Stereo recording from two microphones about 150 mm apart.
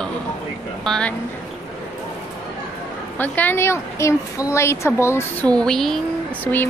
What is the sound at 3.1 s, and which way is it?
A woman's voice, 10° left (ahead or behind).